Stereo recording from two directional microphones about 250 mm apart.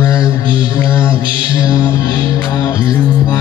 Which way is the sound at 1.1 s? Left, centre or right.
Centre.